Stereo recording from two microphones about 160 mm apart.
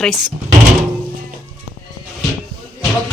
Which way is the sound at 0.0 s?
5° left (ahead or behind).